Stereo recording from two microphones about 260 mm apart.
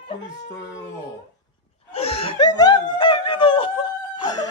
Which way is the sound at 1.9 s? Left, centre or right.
Left.